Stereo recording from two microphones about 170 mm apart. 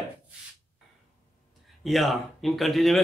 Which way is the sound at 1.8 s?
Centre (ahead or behind).